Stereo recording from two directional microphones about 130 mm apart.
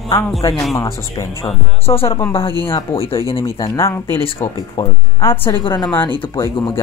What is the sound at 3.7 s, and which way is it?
Speech, 20° left (ahead or behind).